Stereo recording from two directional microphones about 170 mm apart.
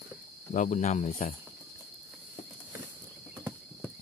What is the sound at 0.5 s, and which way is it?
Speech, 45° left (ahead or behind).